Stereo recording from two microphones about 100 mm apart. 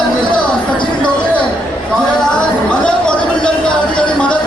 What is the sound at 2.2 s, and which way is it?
Speech, 10° left (ahead or behind).